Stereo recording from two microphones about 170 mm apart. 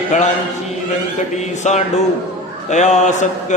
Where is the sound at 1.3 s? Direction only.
45° left (ahead or behind).